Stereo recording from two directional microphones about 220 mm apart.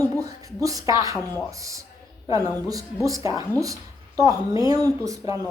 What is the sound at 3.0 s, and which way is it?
A woman's voice, 15° right (ahead or behind).